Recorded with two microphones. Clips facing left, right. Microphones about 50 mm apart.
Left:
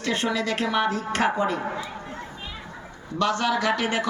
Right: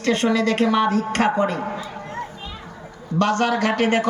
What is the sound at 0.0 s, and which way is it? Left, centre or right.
A man's voice, right.